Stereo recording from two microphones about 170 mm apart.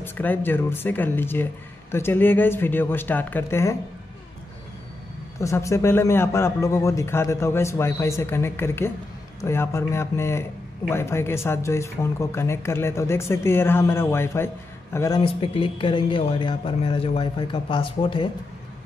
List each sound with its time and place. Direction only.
0.0 s speech: 10° left (ahead or behind)
5.4 s speech: 20° left (ahead or behind)
15.1 s speech: 30° left (ahead or behind)